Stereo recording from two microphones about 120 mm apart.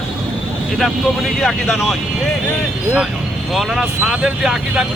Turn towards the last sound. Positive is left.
turn(degrees=-5)  # may be behind; listen again after turning